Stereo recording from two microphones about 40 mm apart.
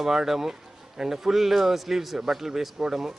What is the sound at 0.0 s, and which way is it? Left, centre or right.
A man's voice, centre.